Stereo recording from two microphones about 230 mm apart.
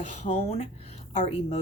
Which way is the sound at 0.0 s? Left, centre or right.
Left.